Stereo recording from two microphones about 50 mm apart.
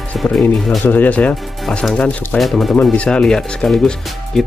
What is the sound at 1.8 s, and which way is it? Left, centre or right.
Speech, centre.